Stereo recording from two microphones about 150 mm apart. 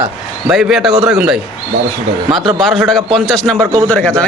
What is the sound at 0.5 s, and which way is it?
A man's voice, 5° right (ahead or behind).